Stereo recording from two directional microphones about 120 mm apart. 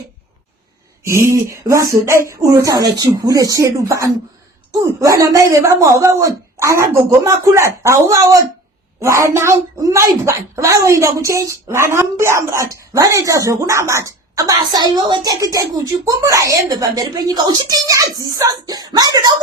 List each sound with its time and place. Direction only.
1.0 s speech: 25° right (ahead or behind)